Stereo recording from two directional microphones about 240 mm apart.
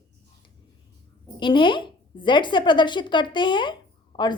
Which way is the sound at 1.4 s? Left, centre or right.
Centre.